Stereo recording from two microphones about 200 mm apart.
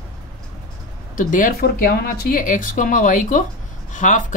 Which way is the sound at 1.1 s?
40° left (ahead or behind).